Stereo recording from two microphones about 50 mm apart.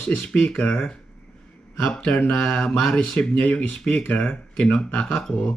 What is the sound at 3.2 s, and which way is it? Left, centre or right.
Speech, left.